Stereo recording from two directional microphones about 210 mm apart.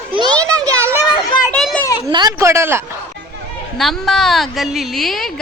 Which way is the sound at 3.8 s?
Centre (ahead or behind).